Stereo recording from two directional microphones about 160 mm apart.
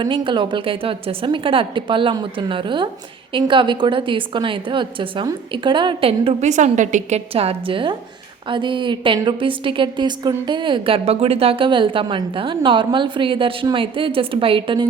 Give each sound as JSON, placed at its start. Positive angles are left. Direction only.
{"t": 0.0, "sound": "a woman's voice", "side_deg": -30}